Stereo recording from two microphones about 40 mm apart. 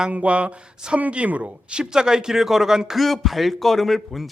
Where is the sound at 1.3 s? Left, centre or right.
Right.